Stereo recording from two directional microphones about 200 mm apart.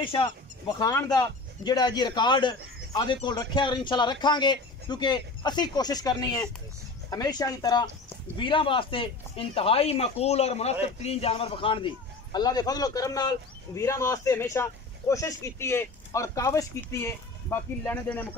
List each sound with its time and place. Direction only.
0.0 s speech: 25° left (ahead or behind); by 18.3 s 10° left (ahead or behind)